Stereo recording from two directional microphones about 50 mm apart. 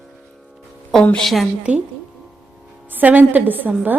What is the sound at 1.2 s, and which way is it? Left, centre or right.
Speech, centre.